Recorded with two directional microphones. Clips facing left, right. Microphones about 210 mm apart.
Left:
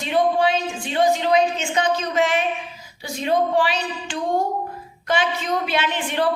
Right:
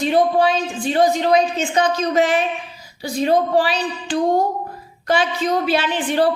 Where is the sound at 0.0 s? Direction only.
35° right (ahead or behind).